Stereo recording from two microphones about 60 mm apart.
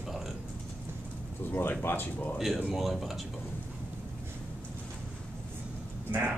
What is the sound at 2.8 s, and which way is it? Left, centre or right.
Speech, centre.